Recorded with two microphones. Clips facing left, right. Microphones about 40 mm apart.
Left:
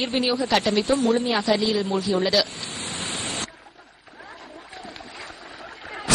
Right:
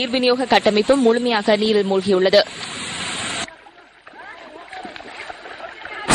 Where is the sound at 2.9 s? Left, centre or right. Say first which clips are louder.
Right 4 dB; right.